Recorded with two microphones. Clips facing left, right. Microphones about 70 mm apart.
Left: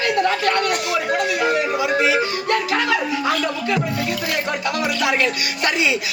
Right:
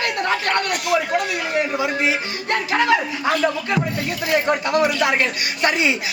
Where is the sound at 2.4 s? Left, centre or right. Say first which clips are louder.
Right 6 dB; right.